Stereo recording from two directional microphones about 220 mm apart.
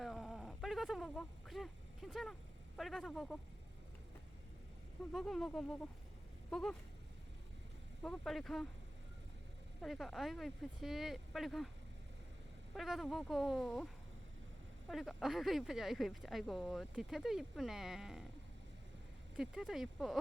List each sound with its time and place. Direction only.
0.0 s a sound: centre (ahead or behind)
2.7 s speech: centre (ahead or behind)
5.1 s speech: centre (ahead or behind)
6.5 s a sound: 5° left (ahead or behind)
8.0 s speech: 5° left (ahead or behind)
9.8 s speech: centre (ahead or behind)
12.7 s speech: centre (ahead or behind)
19.4 s speech: centre (ahead or behind)